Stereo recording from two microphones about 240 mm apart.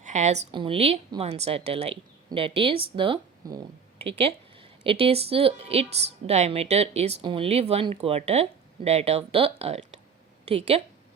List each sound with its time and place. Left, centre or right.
0.0 s a woman's voice: right